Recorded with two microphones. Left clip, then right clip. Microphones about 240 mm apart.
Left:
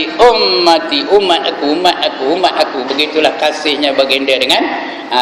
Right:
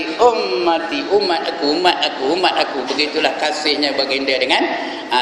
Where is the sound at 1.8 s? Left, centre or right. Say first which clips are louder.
Left 4 dB; centre.